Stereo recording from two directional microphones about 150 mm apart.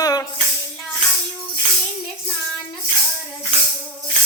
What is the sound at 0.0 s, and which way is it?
Music, 25° left (ahead or behind).